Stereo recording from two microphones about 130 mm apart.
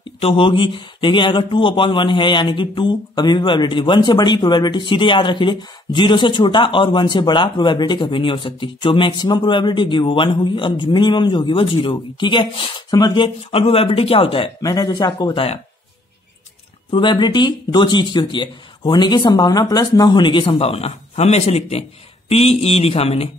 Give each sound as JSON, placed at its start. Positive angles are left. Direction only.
{"t": 0.2, "sound": "speech", "side_deg": 45}
{"t": 14.6, "sound": "speech", "side_deg": 30}
{"t": 16.9, "sound": "speech", "side_deg": 35}